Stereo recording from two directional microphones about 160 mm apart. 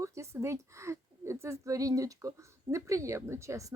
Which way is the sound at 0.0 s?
20° right (ahead or behind).